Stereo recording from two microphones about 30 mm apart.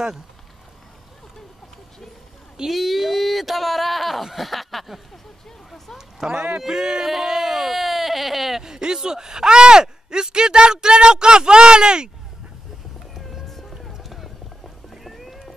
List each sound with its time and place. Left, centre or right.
2.7 s speech: centre
5.9 s speech: centre
8.6 s speech: right
13.2 s music: centre
14.0 s boat: centre
14.9 s cat: centre